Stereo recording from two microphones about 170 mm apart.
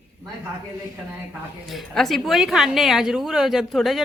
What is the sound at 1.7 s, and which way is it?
A woman's voice, centre (ahead or behind).